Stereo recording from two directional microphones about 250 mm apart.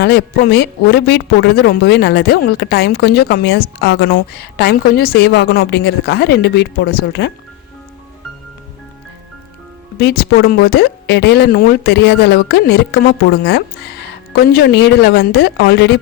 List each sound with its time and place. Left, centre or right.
0.0 s speech: left
10.0 s speech: left